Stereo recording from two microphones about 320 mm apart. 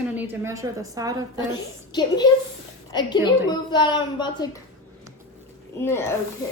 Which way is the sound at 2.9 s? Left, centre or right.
Centre.